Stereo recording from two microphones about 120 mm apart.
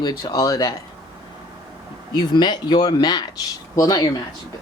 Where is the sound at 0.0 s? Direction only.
35° left (ahead or behind).